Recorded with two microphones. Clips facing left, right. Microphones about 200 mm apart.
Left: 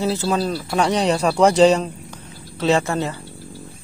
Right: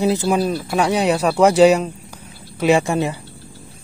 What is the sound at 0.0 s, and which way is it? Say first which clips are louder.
Speech: right 3 dB; 15° right (ahead or behind).